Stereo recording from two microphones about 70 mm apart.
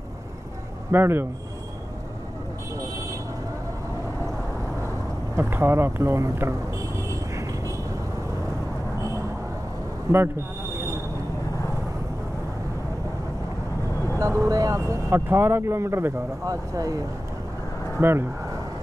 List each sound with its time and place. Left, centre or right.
0.9 s speech: right
5.3 s speech: right
14.1 s speech: right
16.4 s speech: right
18.0 s speech: right